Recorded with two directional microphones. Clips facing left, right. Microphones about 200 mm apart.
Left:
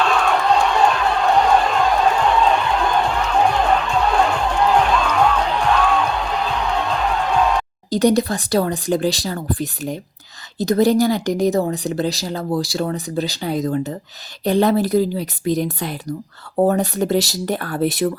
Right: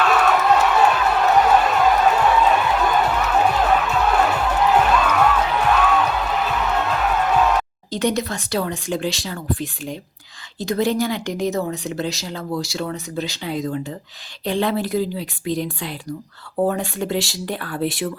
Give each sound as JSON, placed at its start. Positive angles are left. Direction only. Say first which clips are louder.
{"t": 0.4, "sound": "crowd", "louder": "even", "side_deg": -5}
{"t": 3.3, "sound": "music", "louder": "left 2 dB", "side_deg": -5}
{"t": 7.9, "sound": "speech", "louder": "left 7 dB", "side_deg": 35}